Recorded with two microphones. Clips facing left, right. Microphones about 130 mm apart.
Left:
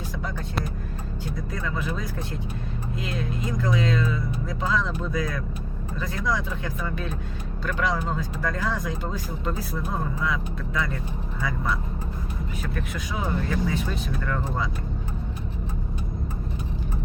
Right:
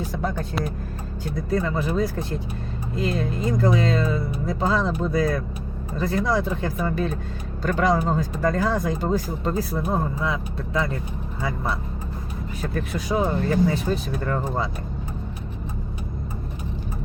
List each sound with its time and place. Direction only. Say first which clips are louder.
1.5 s speech: right 8 dB; 35° right (ahead or behind)
12.6 s speech: right 8 dB; 35° right (ahead or behind)